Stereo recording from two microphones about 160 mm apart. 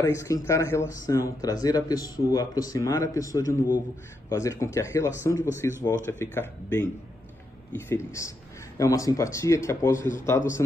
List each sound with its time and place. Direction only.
0.0 s speech: 20° left (ahead or behind)